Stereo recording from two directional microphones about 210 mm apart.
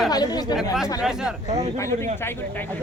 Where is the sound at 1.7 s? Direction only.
15° left (ahead or behind).